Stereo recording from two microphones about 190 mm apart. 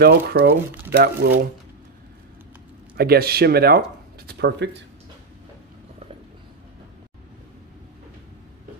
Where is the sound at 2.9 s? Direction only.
55° right (ahead or behind).